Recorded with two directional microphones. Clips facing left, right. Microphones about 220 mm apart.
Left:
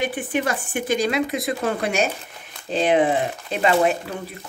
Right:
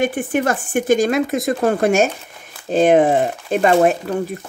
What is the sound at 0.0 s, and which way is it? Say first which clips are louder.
Speech: right 5 dB; 45° right (ahead or behind).